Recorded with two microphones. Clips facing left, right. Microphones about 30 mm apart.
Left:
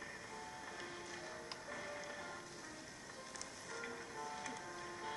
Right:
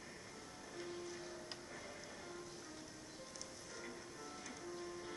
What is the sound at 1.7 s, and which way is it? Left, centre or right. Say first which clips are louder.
Music: left 5 dB; left.